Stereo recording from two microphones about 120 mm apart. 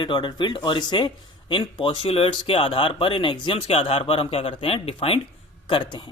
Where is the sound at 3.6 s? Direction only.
55° left (ahead or behind).